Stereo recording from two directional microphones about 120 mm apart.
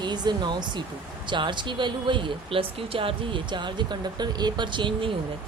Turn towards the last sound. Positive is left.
turn(degrees=-40)  # may be behind; listen again after turning